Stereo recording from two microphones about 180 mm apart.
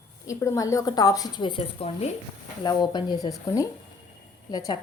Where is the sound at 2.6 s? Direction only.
25° left (ahead or behind).